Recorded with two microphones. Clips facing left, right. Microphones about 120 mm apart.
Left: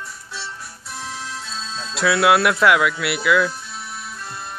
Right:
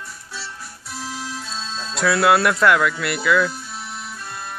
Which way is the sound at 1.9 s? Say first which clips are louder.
Even; centre (ahead or behind).